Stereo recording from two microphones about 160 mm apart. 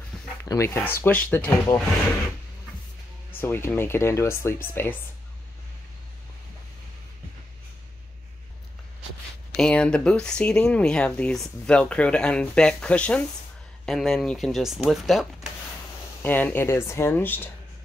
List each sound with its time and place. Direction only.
0.4 s speech: 15° left (ahead or behind)
3.3 s speech: 15° left (ahead or behind)
9.5 s speech: 5° left (ahead or behind)
16.2 s speech: 10° left (ahead or behind)